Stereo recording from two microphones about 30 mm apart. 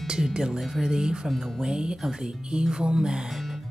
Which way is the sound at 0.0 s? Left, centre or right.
Right.